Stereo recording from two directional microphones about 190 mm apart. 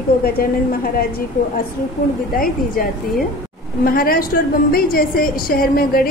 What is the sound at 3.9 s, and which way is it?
A woman's voice, 50° left (ahead or behind).